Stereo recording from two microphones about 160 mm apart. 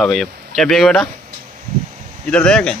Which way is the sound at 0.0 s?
Centre (ahead or behind).